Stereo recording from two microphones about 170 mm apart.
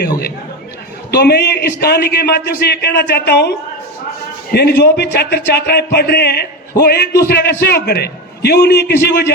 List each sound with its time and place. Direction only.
1.1 s speech: 75° left (ahead or behind)
4.5 s speech: 75° left (ahead or behind)